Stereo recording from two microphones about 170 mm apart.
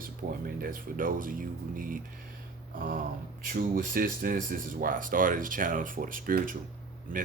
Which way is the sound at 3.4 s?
55° right (ahead or behind).